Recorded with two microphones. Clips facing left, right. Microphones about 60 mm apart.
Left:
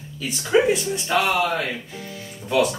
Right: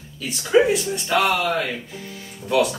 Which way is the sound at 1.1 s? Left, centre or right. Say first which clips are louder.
Right 1 dB; centre.